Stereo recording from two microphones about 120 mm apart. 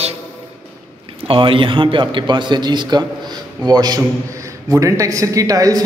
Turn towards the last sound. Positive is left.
turn(degrees=-30)  # may be behind; listen again after turning